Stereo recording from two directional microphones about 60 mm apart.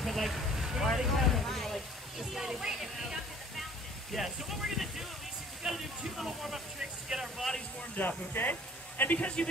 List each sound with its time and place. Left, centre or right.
0.0 s vehicle: centre
4.1 s speech: centre
5.6 s a sound: centre
8.3 s speech: left